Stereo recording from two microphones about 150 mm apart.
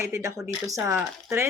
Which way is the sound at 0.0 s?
20° right (ahead or behind).